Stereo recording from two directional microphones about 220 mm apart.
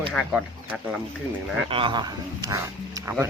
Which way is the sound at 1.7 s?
20° right (ahead or behind).